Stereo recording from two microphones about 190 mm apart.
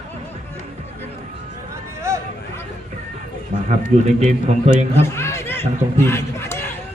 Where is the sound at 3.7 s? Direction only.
35° right (ahead or behind).